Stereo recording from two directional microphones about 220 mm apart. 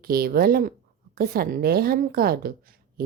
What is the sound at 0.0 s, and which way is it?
Speech, 40° right (ahead or behind).